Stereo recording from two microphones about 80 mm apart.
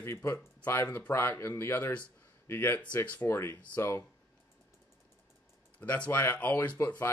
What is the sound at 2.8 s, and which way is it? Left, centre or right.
Speech, centre.